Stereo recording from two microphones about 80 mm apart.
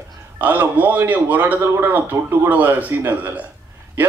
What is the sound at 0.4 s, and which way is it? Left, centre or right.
A man's voice, right.